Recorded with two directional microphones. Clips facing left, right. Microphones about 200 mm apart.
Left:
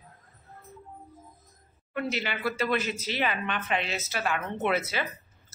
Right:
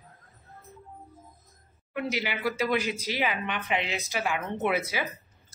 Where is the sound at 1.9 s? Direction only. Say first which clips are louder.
Even; 10° right (ahead or behind).